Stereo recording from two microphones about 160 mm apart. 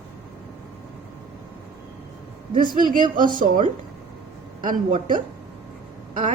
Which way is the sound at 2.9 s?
60° right (ahead or behind).